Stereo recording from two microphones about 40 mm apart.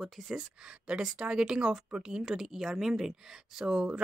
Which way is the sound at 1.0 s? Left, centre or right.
Centre.